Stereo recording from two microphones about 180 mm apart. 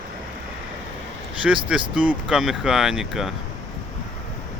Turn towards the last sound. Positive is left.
turn(degrees=0)  # may be behind; listen again after turning